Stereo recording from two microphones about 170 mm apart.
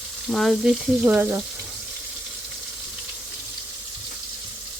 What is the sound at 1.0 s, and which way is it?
Speech, 10° right (ahead or behind).